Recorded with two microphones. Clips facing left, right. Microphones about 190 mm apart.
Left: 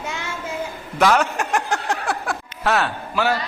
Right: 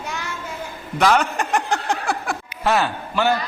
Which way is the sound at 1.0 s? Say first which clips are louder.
Even; centre (ahead or behind).